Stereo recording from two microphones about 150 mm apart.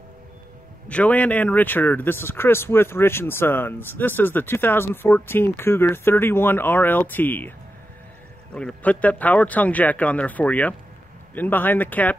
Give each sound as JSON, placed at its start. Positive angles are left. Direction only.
{"t": 0.8, "sound": "speech", "side_deg": 10}
{"t": 8.5, "sound": "speech", "side_deg": 10}